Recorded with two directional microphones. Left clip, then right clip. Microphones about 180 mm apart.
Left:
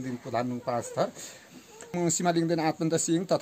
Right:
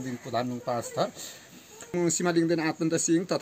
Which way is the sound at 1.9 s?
75° left (ahead or behind).